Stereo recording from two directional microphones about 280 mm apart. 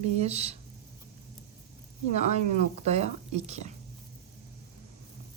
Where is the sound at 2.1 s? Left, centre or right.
Right.